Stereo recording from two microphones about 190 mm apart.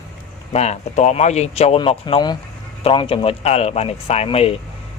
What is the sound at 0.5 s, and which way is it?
Speech, 35° left (ahead or behind).